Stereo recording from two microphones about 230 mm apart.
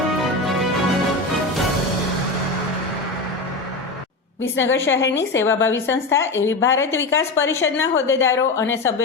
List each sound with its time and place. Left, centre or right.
4.5 s a woman's voice: left
5.1 s a woman's voice: centre